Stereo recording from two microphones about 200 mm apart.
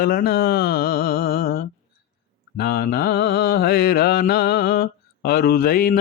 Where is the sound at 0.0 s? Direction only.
50° left (ahead or behind).